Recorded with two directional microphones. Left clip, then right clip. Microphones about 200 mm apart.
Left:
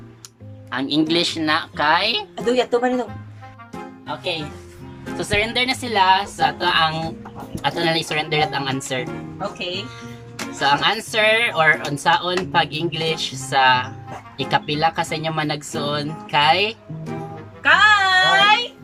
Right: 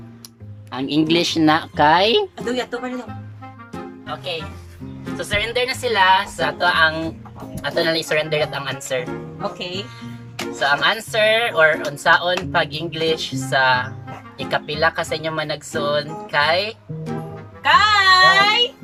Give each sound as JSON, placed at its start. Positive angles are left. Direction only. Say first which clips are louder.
{"t": 0.7, "sound": "speech", "louder": "right 1 dB", "side_deg": -10}
{"t": 1.4, "sound": "speech", "louder": "right 4 dB", "side_deg": -30}
{"t": 2.3, "sound": "a woman's voice", "louder": "left 5 dB", "side_deg": 10}
{"t": 4.0, "sound": "speech", "louder": "left 2 dB", "side_deg": 15}
{"t": 10.6, "sound": "speech", "louder": "even", "side_deg": 15}
{"t": 17.6, "sound": "a sound", "louder": "even", "side_deg": -15}